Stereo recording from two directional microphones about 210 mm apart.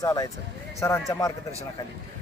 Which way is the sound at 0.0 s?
20° left (ahead or behind).